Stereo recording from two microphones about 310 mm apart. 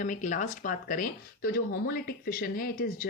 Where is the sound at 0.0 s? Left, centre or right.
Left.